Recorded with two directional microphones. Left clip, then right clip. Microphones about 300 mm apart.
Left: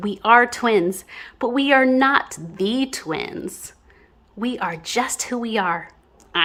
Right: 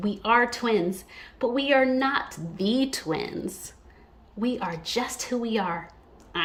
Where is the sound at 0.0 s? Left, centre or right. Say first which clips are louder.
Left 7 dB; centre.